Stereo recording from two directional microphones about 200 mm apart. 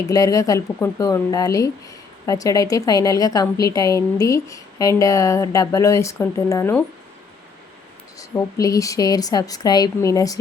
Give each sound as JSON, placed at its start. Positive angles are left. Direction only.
{"t": 0.1, "sound": "a woman's voice", "side_deg": 15}
{"t": 8.2, "sound": "a woman's voice", "side_deg": 15}